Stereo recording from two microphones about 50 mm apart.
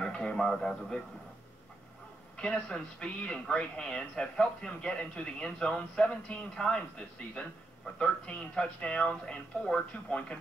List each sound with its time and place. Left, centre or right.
0.0 s a man's voice: centre
2.3 s speech: centre